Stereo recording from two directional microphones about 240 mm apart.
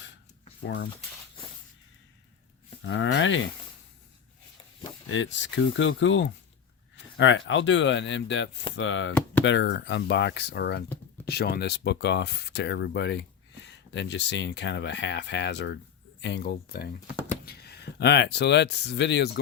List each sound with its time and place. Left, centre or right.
2.8 s speech: left
5.0 s speech: left